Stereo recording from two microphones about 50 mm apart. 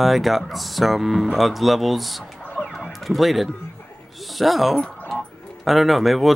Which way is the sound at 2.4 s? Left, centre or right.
Left.